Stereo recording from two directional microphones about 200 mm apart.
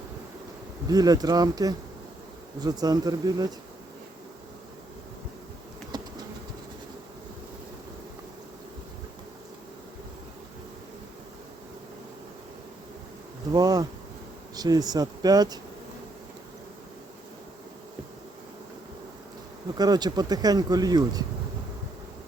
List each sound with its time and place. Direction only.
0.9 s speech: 20° right (ahead or behind)
5.9 s insect: 20° right (ahead or behind)
13.5 s bee: 20° right (ahead or behind)
14.5 s speech: 20° right (ahead or behind)
19.7 s speech: 20° right (ahead or behind)